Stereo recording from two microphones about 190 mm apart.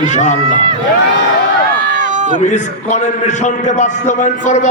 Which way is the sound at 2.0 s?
40° right (ahead or behind).